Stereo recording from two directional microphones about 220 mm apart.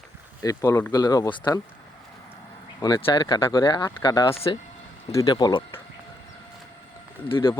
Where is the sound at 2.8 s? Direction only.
20° left (ahead or behind).